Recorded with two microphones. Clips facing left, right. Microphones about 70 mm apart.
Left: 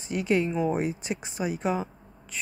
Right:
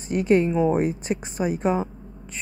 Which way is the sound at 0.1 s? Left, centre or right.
Right.